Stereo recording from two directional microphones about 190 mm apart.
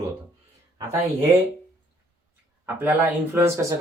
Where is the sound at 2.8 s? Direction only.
10° right (ahead or behind).